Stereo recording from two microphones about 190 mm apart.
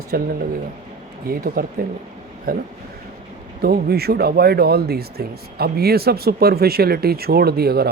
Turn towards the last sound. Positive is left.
turn(degrees=-55)  # may be behind; listen again after turning